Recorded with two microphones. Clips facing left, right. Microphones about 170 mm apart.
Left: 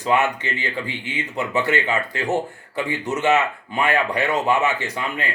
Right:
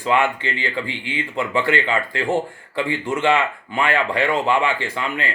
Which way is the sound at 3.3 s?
10° left (ahead or behind).